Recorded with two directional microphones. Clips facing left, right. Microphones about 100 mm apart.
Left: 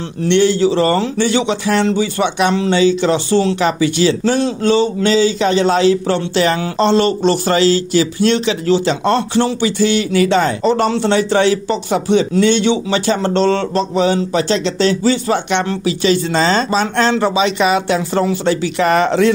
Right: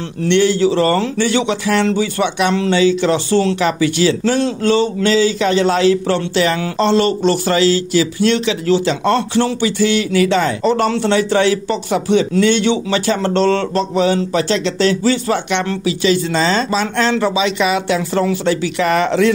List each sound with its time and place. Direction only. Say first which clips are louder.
0.3 s speech: left 1 dB; 25° left (ahead or behind)
15.8 s speech: left 1 dB; 35° left (ahead or behind)